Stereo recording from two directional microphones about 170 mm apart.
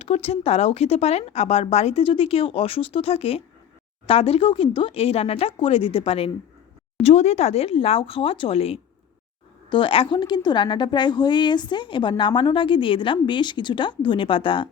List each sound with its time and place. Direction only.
0.0 s a woman's voice: 35° left (ahead or behind)